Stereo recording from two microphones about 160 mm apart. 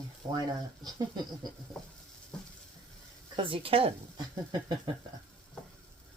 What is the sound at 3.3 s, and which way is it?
Speech, 35° right (ahead or behind).